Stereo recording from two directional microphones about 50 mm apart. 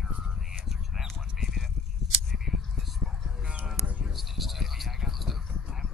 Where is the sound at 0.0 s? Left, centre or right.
Centre.